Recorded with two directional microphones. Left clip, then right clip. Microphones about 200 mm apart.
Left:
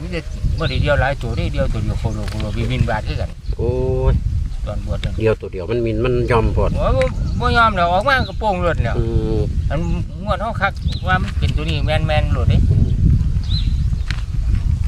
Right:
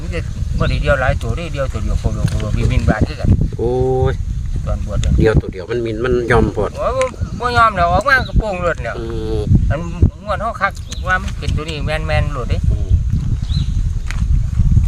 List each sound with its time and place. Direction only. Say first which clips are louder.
0.6 s speech: right 2 dB; 5° right (ahead or behind)
2.2 s speech: right 2 dB; 15° right (ahead or behind)
2.6 s speech: right 3 dB; 5° right (ahead or behind)
3.8 s speech: right 5 dB; 45° right (ahead or behind)
5.2 s speech: right 3 dB; 45° right (ahead or behind)
6.7 s speech: right 1 dB; 5° right (ahead or behind)
9.0 s speech: even; 35° right (ahead or behind)
10.2 s speech: right 1 dB; 5° right (ahead or behind)